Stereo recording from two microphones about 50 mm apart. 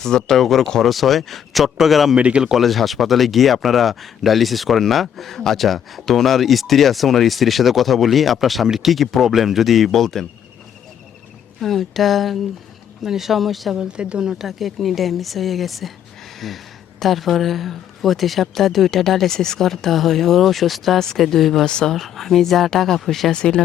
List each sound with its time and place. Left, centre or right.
0.0 s speech: centre
2.1 s speech: right
2.6 s speech: centre
11.6 s speech: centre
13.7 s speech: centre
21.7 s speech: centre
21.9 s speech: centre
23.3 s speech: centre